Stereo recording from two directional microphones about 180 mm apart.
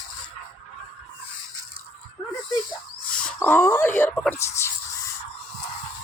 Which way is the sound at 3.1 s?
10° left (ahead or behind).